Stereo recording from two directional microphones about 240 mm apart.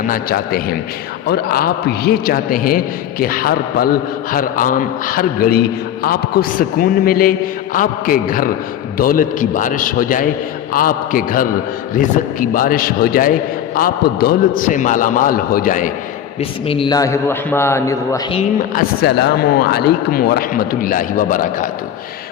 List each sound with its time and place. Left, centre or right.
0.1 s a man's voice: left
16.4 s a man's voice: left
18.3 s a man's voice: left